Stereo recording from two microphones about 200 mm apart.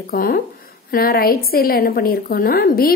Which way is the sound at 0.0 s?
45° left (ahead or behind).